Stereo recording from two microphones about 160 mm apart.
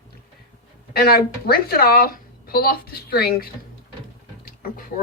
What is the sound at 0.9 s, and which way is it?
Speech, 70° left (ahead or behind).